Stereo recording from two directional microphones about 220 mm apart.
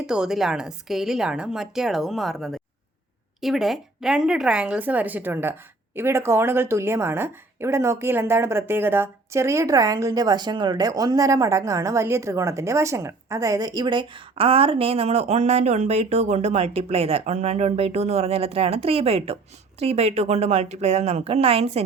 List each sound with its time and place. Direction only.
0.0 s a woman's voice: 5° right (ahead or behind); by 21.8 s 30° right (ahead or behind)